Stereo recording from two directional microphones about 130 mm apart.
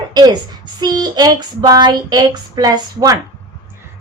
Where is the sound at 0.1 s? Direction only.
35° right (ahead or behind).